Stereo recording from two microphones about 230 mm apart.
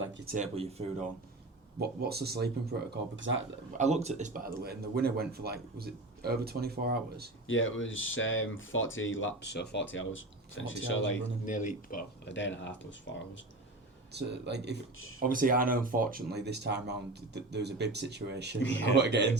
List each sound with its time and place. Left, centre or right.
0.3 s speech: right
1.8 s speech: right
2.9 s speech: right
3.7 s speech: right
7.4 s speech: left
11.4 s speech: left
12.3 s speech: left
14.1 s speech: right
14.9 s speech: left
15.3 s speech: right
18.6 s speech: left
18.9 s speech: right